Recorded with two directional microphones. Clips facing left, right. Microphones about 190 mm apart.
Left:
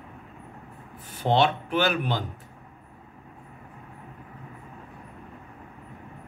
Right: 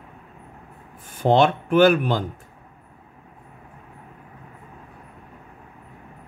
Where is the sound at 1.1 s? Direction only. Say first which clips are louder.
Right 5 dB; 50° right (ahead or behind).